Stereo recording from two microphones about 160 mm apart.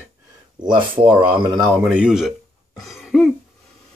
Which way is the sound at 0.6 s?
30° right (ahead or behind).